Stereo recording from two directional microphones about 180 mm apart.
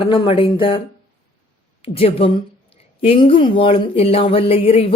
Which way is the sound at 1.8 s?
30° left (ahead or behind).